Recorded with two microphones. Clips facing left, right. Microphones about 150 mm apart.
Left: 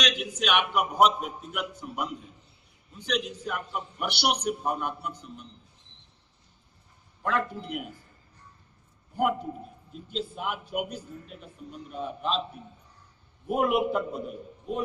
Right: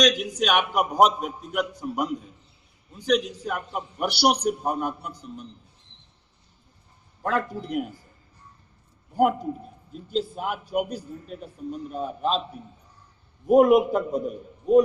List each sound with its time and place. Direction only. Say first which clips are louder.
0.0 s a man's voice: right 7 dB; 40° right (ahead or behind)
7.2 s a man's voice: right 3 dB; 35° right (ahead or behind)
9.1 s a man's voice: right 5 dB; 35° right (ahead or behind)
13.5 s a man's voice: right 8 dB; 40° right (ahead or behind)